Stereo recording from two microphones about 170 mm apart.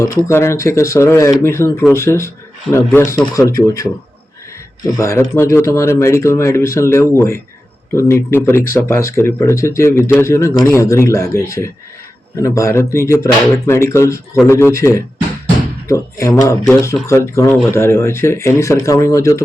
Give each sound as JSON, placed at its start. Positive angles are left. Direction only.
{"t": 0.3, "sound": "speech", "side_deg": 15}
{"t": 4.8, "sound": "speech", "side_deg": 20}